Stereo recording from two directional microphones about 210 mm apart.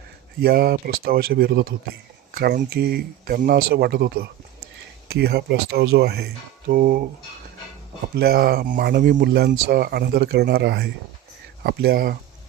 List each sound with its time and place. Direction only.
0.4 s speech: 45° right (ahead or behind)
8.1 s speech: 50° right (ahead or behind)